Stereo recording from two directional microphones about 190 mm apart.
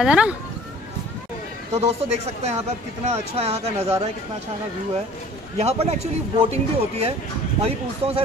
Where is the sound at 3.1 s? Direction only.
35° right (ahead or behind).